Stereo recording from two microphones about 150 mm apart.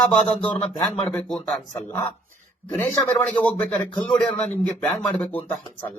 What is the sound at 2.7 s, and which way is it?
Speech, 10° left (ahead or behind).